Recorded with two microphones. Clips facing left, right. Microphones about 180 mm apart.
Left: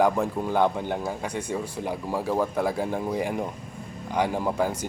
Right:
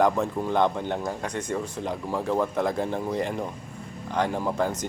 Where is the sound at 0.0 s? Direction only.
10° left (ahead or behind).